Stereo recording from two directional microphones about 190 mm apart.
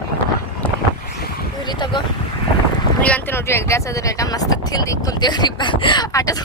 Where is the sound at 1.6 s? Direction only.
25° left (ahead or behind).